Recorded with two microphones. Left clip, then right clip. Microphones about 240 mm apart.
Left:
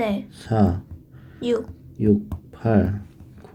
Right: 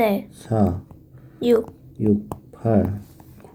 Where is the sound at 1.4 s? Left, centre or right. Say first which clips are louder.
Right 5 dB; right.